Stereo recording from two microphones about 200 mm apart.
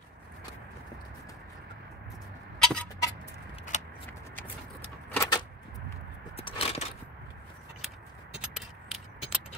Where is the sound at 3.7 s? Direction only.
35° left (ahead or behind).